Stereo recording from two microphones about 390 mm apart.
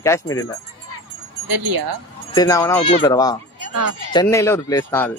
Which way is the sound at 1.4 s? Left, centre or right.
Right.